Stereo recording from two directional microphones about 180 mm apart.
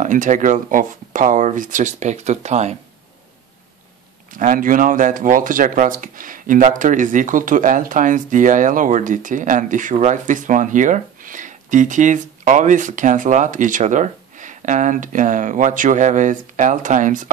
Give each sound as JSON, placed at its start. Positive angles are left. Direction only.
{"t": 0.0, "sound": "speech", "side_deg": -45}
{"t": 4.3, "sound": "speech", "side_deg": -45}